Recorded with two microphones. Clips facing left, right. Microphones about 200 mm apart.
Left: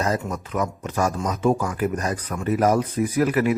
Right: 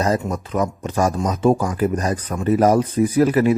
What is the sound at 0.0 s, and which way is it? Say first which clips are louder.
Speech: right 4 dB; 30° right (ahead or behind).